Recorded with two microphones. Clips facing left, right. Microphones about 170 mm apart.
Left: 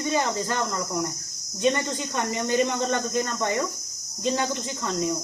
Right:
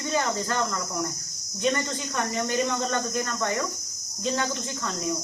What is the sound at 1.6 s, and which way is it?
Cricket, 20° left (ahead or behind).